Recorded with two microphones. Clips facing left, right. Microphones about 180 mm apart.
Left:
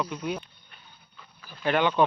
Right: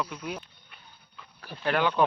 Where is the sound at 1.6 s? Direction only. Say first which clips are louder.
Left 2 dB; centre (ahead or behind).